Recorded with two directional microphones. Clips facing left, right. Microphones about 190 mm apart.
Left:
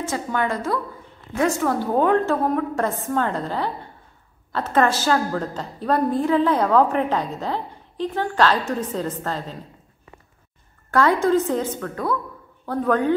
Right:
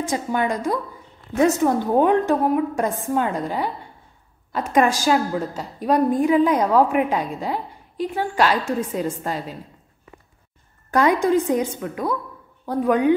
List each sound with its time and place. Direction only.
0.0 s a woman's voice: 15° right (ahead or behind)
10.9 s a woman's voice: 15° right (ahead or behind)